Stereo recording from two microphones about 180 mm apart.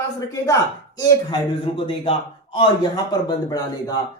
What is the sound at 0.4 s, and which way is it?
Speech, 20° left (ahead or behind).